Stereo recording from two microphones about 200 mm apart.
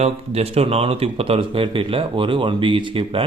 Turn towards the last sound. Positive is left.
turn(degrees=-25)  # may be behind; listen again after turning